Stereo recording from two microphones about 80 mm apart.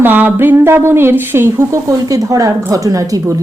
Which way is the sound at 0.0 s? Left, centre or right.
Right.